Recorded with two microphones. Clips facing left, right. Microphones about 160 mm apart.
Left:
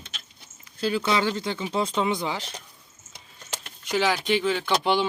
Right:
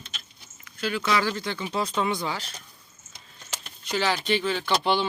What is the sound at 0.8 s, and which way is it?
Speech, 30° left (ahead or behind).